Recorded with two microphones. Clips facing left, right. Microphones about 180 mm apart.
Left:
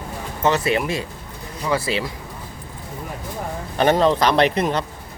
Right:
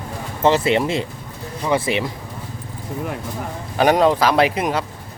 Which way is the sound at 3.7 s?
10° right (ahead or behind).